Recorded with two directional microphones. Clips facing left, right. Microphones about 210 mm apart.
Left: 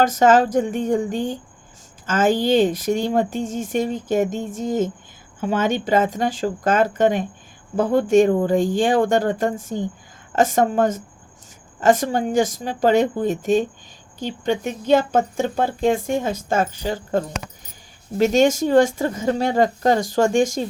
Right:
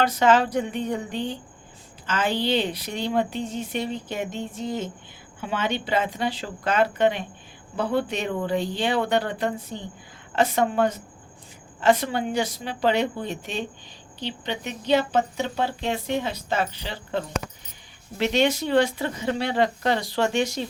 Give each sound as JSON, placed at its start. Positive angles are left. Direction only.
{"t": 0.0, "sound": "speech", "side_deg": 45}